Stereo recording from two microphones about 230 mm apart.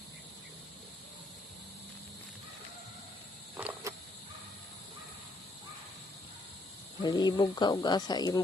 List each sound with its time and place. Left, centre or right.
3.6 s cricket: centre
7.0 s speech: centre